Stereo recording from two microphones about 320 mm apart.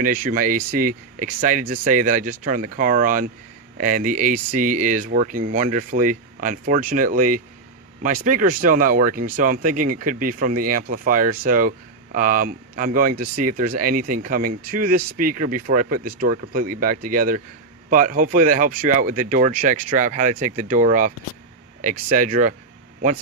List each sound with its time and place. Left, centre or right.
0.0 s speech: right